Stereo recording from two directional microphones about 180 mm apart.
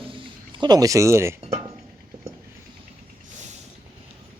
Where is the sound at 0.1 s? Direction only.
25° right (ahead or behind).